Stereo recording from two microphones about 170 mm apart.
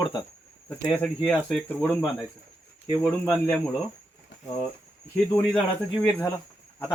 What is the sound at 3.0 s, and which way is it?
Speech, 5° left (ahead or behind).